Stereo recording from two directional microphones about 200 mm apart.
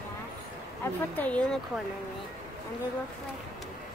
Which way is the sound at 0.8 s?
5° left (ahead or behind).